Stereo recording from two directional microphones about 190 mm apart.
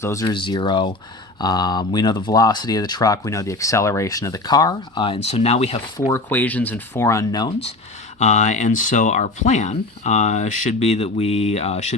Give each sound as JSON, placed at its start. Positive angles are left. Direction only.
{"t": 0.0, "sound": "speech", "side_deg": 15}
{"t": 6.1, "sound": "speech", "side_deg": 10}
{"t": 8.2, "sound": "speech", "side_deg": 40}